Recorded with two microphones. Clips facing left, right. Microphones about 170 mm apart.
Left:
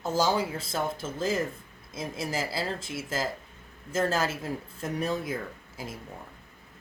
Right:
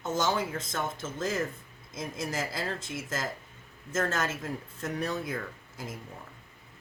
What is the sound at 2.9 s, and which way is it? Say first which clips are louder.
Speech: left 3 dB; 30° left (ahead or behind).